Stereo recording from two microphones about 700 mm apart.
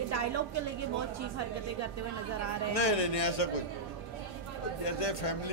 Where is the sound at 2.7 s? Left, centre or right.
Left.